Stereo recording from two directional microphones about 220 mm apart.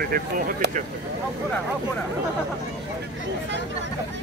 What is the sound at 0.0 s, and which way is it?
Speech, 45° right (ahead or behind).